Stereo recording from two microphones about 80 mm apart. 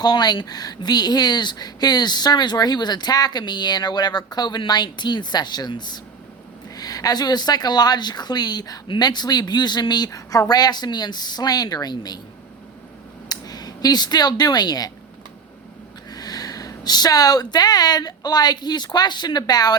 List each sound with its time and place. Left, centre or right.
0.0 s speech: left
6.7 s speech: left
13.2 s speech: left
16.0 s speech: left